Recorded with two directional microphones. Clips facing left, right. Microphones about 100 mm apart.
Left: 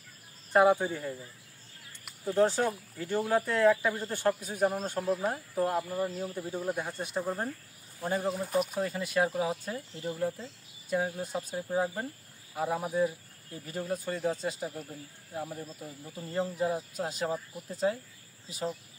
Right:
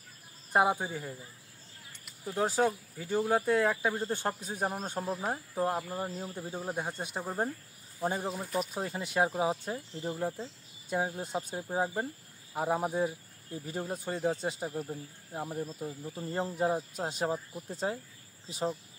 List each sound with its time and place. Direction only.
0.5 s speech: 15° right (ahead or behind)
2.3 s speech: 10° right (ahead or behind); by 17.9 s 30° right (ahead or behind)